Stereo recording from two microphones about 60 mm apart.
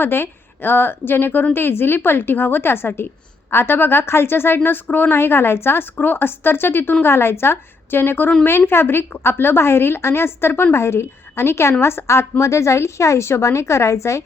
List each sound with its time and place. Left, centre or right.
0.0 s speech: left
5.1 s a woman's voice: left